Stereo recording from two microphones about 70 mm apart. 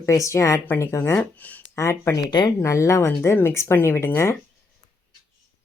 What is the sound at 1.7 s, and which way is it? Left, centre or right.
Speech, left.